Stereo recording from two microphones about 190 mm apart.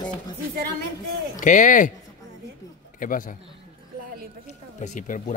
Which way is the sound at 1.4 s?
45° left (ahead or behind).